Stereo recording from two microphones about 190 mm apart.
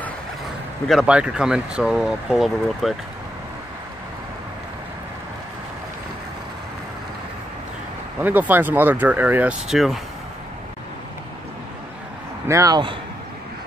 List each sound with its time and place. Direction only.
0.8 s speech: 5° right (ahead or behind)
8.2 s speech: 10° right (ahead or behind)
12.4 s speech: 20° right (ahead or behind)